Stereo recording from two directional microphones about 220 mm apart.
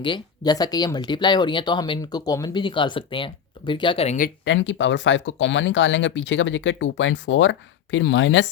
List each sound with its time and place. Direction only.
0.0 s speech: 20° left (ahead or behind)
4.4 s speech: 55° left (ahead or behind)